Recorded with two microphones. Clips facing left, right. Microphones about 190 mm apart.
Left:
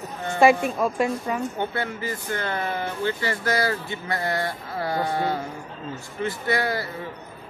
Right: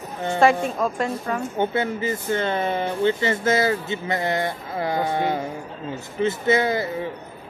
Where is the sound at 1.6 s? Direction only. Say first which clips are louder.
Right 5 dB; 20° right (ahead or behind).